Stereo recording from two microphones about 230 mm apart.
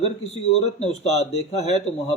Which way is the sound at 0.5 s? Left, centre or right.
Left.